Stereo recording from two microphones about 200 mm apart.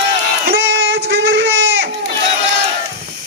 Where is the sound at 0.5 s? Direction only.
55° right (ahead or behind).